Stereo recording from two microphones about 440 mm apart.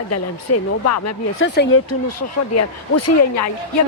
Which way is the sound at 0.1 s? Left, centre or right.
Left.